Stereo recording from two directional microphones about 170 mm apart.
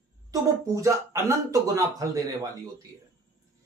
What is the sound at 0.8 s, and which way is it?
A man's voice, 15° right (ahead or behind).